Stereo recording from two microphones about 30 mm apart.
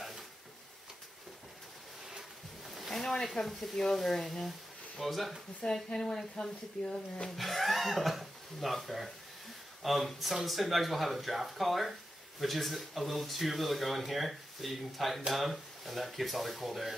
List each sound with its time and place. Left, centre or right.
2.9 s a sound: centre
3.7 s speech: centre
5.7 s speech: left
7.2 s speech: centre